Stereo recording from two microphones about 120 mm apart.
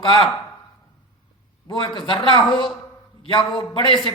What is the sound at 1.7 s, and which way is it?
A man's voice, 45° left (ahead or behind).